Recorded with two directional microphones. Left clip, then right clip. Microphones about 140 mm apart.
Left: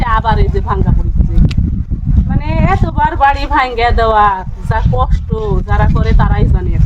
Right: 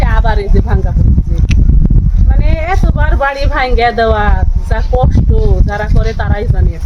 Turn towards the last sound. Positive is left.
turn(degrees=20)  # may be behind; listen again after turning